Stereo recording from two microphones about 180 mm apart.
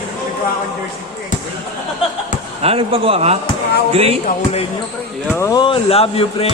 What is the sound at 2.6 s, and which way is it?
Speech, 30° right (ahead or behind).